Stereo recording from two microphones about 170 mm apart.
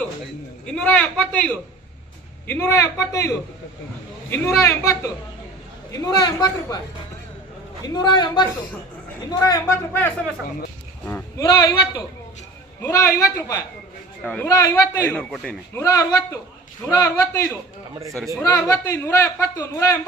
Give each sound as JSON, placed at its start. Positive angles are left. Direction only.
{"t": 0.6, "sound": "a man's voice", "side_deg": 5}
{"t": 4.6, "sound": "a man's voice", "side_deg": 20}
{"t": 11.0, "sound": "a sound", "side_deg": 10}
{"t": 11.4, "sound": "a man's voice", "side_deg": 25}
{"t": 15.8, "sound": "a man's voice", "side_deg": 20}
{"t": 17.9, "sound": "speech", "side_deg": -20}
{"t": 18.3, "sound": "a man's voice", "side_deg": 15}